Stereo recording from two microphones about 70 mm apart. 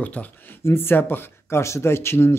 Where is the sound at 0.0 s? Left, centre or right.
Left.